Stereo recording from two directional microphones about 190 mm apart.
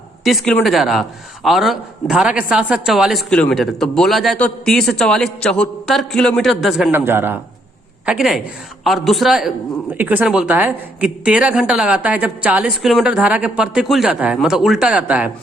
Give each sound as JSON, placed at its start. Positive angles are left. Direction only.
{"t": 0.3, "sound": "a man's voice", "side_deg": 0}